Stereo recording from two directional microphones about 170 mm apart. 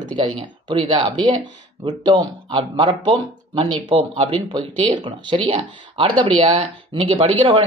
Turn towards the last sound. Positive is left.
turn(degrees=-35)  # may be behind; listen again after turning